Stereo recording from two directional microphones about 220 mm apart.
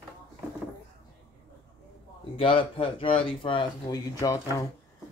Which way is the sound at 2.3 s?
25° left (ahead or behind).